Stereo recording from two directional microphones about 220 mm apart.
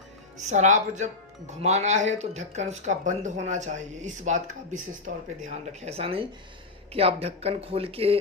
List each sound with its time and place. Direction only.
0.3 s speech: 35° right (ahead or behind)